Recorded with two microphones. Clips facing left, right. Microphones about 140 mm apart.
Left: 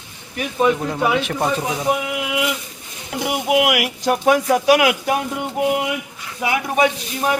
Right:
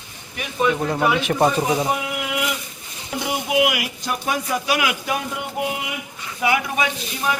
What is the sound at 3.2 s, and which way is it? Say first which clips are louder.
Speech: left 3 dB; 70° left (ahead or behind).